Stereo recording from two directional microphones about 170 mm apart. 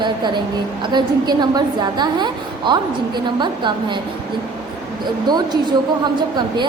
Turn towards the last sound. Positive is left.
turn(degrees=-25)  # may be behind; listen again after turning